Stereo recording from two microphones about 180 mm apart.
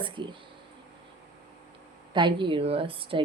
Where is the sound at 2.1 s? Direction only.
25° right (ahead or behind).